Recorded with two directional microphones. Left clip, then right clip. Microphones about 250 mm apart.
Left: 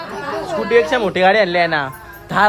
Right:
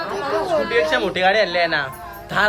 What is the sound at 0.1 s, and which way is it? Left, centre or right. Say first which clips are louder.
Chatter: right 2 dB; centre.